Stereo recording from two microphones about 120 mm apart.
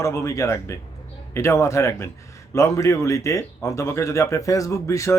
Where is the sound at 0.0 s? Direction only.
25° left (ahead or behind).